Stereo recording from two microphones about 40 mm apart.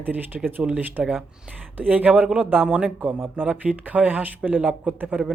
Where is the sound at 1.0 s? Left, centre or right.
Right.